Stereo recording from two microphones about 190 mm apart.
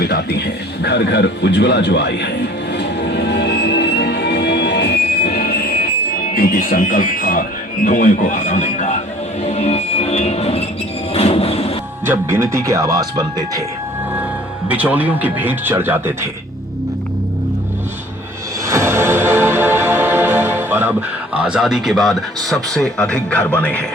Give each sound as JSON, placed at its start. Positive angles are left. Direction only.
{"t": 0.0, "sound": "speech", "side_deg": 55}
{"t": 2.7, "sound": "music", "side_deg": 65}
{"t": 6.3, "sound": "speech", "side_deg": 50}
{"t": 9.4, "sound": "music", "side_deg": 35}
{"t": 11.1, "sound": "train", "side_deg": 30}
{"t": 12.0, "sound": "speech", "side_deg": -10}
{"t": 14.7, "sound": "speech", "side_deg": -10}
{"t": 18.6, "sound": "music", "side_deg": -15}
{"t": 21.3, "sound": "speech", "side_deg": -5}